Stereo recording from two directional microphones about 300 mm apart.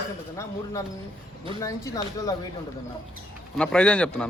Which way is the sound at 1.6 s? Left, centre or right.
Centre.